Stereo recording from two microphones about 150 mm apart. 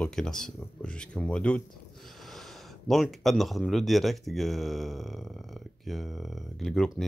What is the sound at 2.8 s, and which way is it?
Speech, centre (ahead or behind).